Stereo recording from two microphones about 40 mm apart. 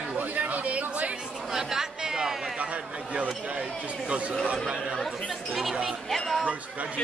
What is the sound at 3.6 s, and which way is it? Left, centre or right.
Speech, right.